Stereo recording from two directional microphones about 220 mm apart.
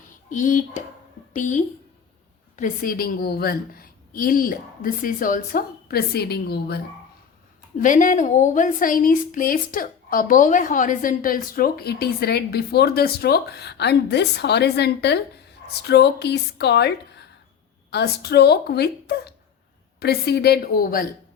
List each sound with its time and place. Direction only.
0.3 s a woman's voice: 35° left (ahead or behind)
7.8 s a woman's voice: 35° left (ahead or behind)